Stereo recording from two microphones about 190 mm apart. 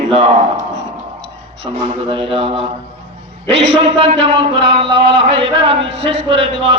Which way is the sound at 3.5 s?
35° right (ahead or behind).